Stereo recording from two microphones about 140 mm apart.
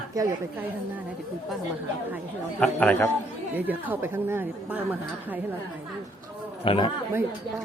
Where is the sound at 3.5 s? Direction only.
10° right (ahead or behind).